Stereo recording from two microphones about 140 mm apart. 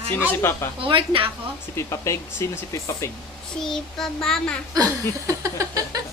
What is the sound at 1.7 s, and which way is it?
Speech, 20° left (ahead or behind).